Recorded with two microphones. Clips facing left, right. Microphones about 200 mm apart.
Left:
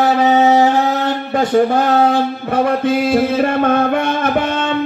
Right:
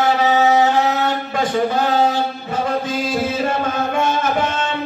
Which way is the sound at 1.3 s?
55° left (ahead or behind).